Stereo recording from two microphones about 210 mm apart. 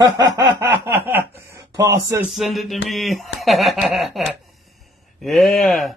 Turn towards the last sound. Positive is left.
turn(degrees=0)  # may be behind; listen again after turning